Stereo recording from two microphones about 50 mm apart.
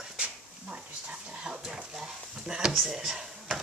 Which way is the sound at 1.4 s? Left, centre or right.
Centre.